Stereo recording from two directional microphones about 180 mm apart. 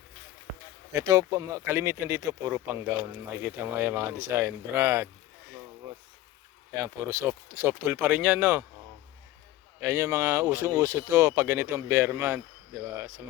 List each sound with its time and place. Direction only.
0.9 s speech: 20° right (ahead or behind)
6.7 s speech: 15° right (ahead or behind)
9.8 s speech: 15° right (ahead or behind)